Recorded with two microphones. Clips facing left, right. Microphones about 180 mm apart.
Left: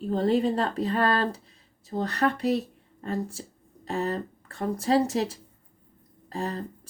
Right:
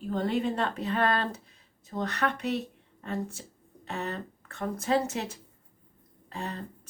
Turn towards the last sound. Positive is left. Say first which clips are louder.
# left 5 dB
turn(degrees=35)  # may be behind; listen again after turning